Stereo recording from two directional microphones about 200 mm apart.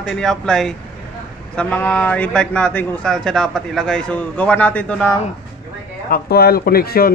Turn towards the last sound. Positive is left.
turn(degrees=50)  # may be behind; listen again after turning